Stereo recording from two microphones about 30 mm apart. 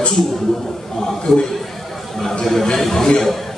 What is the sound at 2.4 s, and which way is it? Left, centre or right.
Speech, centre.